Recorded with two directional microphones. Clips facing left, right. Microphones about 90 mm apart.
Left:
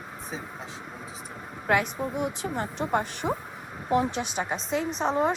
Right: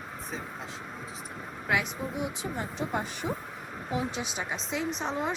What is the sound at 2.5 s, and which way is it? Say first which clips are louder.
Speech: left 6 dB; 55° left (ahead or behind).